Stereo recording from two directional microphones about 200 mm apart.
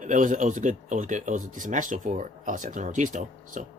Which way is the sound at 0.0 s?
40° right (ahead or behind).